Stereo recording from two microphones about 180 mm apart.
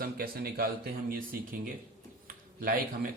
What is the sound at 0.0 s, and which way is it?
Speech, 55° right (ahead or behind).